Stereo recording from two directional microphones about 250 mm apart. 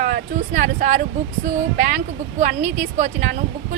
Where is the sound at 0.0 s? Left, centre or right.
Right.